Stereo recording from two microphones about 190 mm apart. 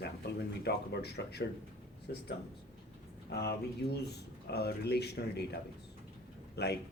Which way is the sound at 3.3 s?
60° left (ahead or behind).